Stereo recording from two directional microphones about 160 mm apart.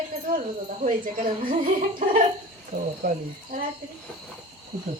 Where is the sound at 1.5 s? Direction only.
55° right (ahead or behind).